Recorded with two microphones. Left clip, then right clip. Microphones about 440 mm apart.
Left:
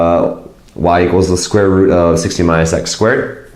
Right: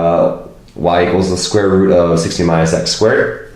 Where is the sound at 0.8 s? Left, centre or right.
Left.